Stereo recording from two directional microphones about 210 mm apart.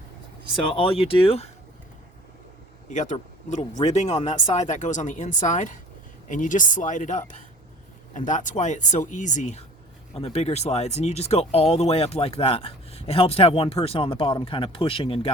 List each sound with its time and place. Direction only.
0.7 s speech: 25° left (ahead or behind)
2.9 s a man's voice: 35° left (ahead or behind)